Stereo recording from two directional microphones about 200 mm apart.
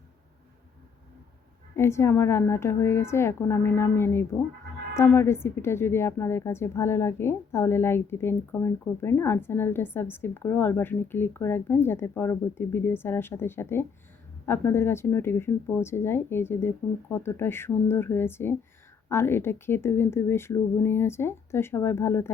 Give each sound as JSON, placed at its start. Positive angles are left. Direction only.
{"t": 1.7, "sound": "a woman's voice", "side_deg": 15}